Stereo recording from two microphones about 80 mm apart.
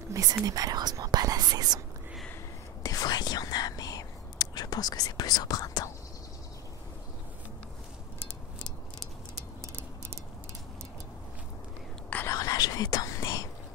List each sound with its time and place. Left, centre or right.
0.1 s whispering: right
0.5 s speech: right
2.8 s whispering: left
12.3 s whispering: left